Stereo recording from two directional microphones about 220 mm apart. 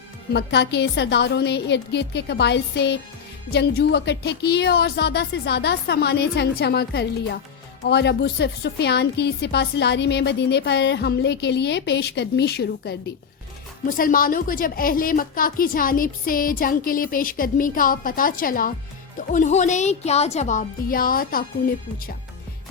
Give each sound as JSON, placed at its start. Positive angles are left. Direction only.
{"t": 0.3, "sound": "a woman's voice", "side_deg": 50}